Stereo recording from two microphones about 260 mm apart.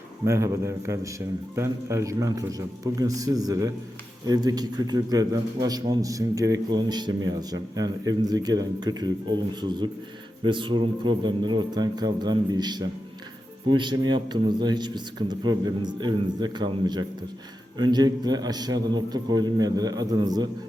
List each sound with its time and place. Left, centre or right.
0.3 s a man's voice: centre